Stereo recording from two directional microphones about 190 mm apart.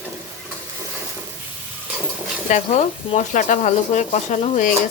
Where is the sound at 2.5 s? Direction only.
40° left (ahead or behind).